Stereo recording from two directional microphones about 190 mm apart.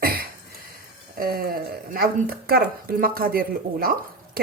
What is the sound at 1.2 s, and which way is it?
Speech, 50° right (ahead or behind).